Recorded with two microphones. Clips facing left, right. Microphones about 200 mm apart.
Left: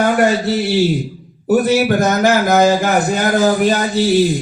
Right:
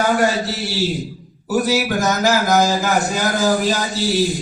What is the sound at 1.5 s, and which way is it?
A man's voice, 60° left (ahead or behind).